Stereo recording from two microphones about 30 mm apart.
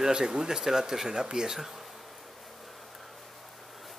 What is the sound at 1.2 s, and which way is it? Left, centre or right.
Speech, right.